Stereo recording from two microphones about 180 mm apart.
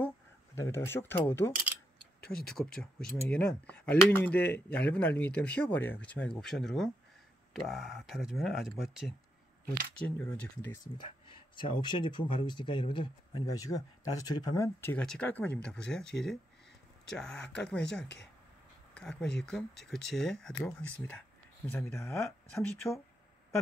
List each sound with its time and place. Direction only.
0.6 s speech: 15° left (ahead or behind)
11.0 s speech: 30° left (ahead or behind); by 18.0 s 5° left (ahead or behind)
18.0 s speech: 70° left (ahead or behind)
18.9 s speech: 5° left (ahead or behind)